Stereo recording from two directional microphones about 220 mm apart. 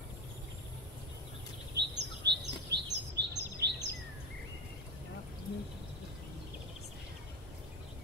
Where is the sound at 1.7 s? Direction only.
50° right (ahead or behind).